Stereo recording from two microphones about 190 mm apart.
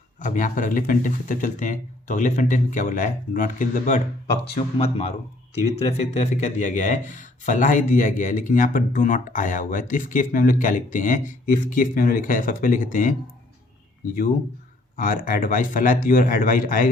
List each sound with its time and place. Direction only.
0.2 s a man's voice: 40° left (ahead or behind)
14.9 s speech: 45° left (ahead or behind)